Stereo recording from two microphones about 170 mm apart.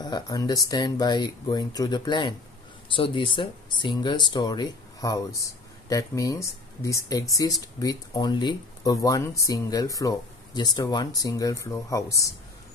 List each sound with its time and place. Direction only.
0.0 s speech: 25° left (ahead or behind)